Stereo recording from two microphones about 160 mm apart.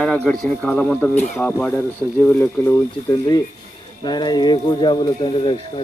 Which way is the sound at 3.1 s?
25° left (ahead or behind).